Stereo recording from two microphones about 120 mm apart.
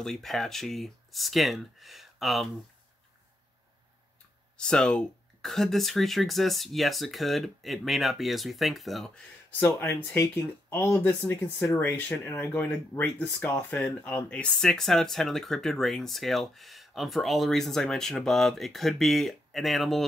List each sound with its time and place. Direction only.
0.0 s speech: 5° left (ahead or behind)
4.6 s speech: 5° left (ahead or behind)
9.5 s speech: 15° left (ahead or behind); by 20.1 s centre (ahead or behind)